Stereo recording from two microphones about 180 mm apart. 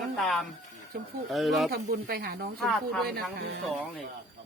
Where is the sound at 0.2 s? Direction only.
Centre (ahead or behind).